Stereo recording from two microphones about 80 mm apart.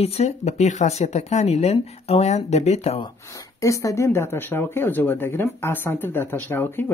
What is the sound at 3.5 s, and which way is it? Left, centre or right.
Speech, left.